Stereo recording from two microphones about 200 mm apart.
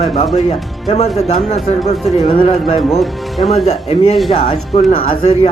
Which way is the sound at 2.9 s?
Centre (ahead or behind).